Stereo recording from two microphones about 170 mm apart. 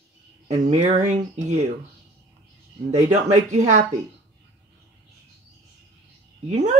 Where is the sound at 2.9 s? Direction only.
45° right (ahead or behind).